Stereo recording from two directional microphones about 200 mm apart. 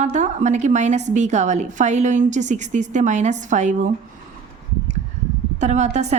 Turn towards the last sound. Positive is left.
turn(degrees=-35)  # may be behind; listen again after turning